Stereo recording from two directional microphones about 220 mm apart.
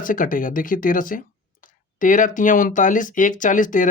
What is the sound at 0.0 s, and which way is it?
Speech, 40° left (ahead or behind).